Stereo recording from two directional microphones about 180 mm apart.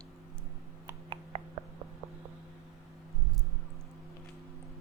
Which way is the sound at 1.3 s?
35° right (ahead or behind).